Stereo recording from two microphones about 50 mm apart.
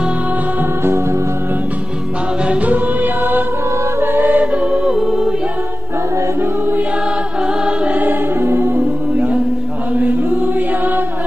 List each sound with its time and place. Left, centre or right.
2.4 s music: right
2.7 s music: right
4.0 s choir: right
4.6 s music: centre
7.6 s choir: right
8.0 s music: right
9.9 s chant: right